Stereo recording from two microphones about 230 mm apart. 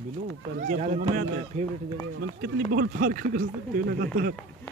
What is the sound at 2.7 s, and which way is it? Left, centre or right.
Speech, right.